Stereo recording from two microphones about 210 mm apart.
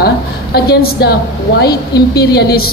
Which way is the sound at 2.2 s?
50° left (ahead or behind).